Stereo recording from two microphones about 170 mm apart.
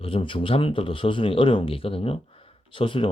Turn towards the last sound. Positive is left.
turn(degrees=30)  # may be behind; listen again after turning